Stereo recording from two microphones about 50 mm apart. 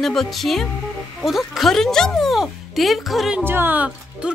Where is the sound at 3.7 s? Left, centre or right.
Right.